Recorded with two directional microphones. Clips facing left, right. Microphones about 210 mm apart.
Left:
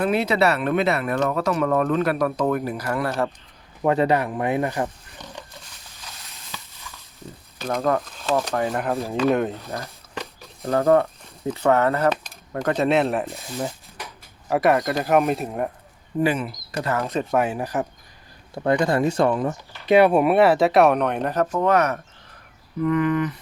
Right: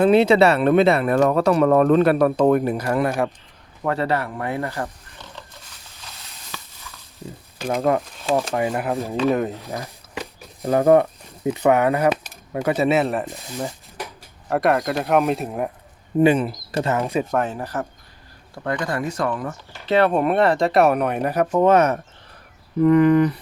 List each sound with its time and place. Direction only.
0.0 s speech: 25° right (ahead or behind)
3.8 s speech: 15° left (ahead or behind)
7.6 s speech: 15° right (ahead or behind)
8.6 s speech: centre (ahead or behind)
10.2 s speech: 15° right (ahead or behind)
16.1 s speech: 25° right (ahead or behind)
17.0 s speech: 10° right (ahead or behind)
17.3 s speech: 10° left (ahead or behind)
18.5 s speech: 25° left (ahead or behind)
19.8 s speech: 15° left (ahead or behind); by 21.4 s 10° right (ahead or behind)
21.5 s speech: 20° right (ahead or behind)